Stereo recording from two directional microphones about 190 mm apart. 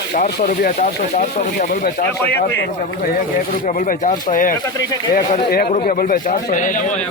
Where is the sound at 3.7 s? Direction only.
40° left (ahead or behind).